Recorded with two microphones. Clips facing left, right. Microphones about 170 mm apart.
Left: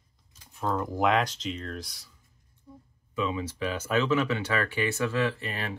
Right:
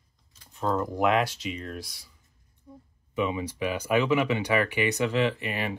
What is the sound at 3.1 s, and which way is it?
Speech, 15° right (ahead or behind).